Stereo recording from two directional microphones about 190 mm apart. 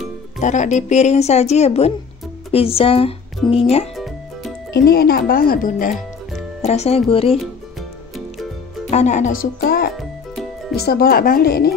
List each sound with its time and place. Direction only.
0.4 s speech: 40° left (ahead or behind)
3.9 s music: centre (ahead or behind)
4.7 s speech: 55° left (ahead or behind)
6.6 s speech: 35° left (ahead or behind)
8.9 s speech: 40° left (ahead or behind)
9.9 s music: centre (ahead or behind)
10.8 s speech: 55° left (ahead or behind)